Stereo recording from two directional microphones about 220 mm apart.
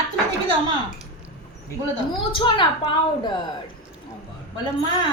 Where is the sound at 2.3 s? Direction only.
20° left (ahead or behind).